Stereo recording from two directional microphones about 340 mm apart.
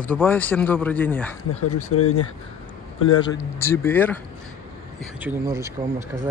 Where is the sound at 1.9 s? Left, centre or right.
Left.